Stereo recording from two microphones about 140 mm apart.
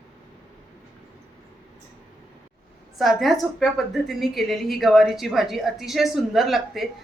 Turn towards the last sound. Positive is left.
turn(degrees=0)  # may be behind; listen again after turning